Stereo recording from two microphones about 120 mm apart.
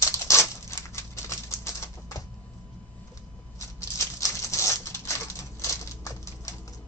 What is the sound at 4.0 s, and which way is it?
Patter, 25° left (ahead or behind).